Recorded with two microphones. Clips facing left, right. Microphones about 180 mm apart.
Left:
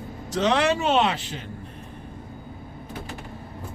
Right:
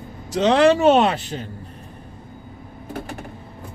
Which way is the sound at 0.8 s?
45° right (ahead or behind).